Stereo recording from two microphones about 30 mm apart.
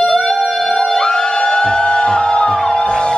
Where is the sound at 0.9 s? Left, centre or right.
Left.